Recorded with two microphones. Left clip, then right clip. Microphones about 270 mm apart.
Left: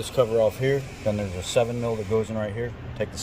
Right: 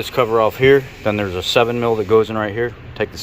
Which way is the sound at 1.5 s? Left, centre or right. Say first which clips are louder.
Right 7 dB; centre.